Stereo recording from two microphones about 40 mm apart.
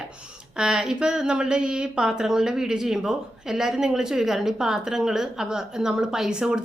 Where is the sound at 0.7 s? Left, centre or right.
Centre.